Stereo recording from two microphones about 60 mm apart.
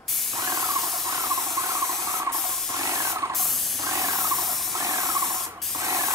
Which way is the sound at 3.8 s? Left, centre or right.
Right.